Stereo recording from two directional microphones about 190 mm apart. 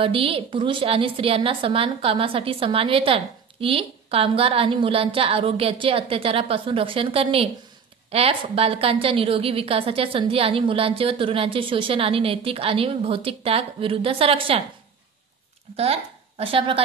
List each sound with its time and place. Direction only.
0.0 s a woman's voice: 30° right (ahead or behind)
15.7 s a woman's voice: 30° right (ahead or behind)